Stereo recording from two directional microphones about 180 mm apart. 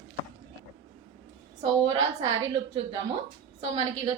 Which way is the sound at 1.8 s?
25° right (ahead or behind).